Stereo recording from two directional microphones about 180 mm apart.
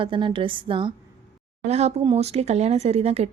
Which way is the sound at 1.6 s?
40° right (ahead or behind).